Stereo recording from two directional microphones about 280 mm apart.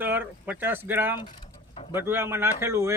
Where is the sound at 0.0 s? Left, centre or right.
Centre.